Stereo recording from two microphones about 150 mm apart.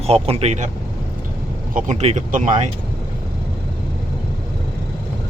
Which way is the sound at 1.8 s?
50° right (ahead or behind).